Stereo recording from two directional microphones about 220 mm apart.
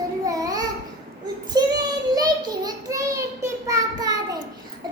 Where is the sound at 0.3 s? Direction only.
15° right (ahead or behind).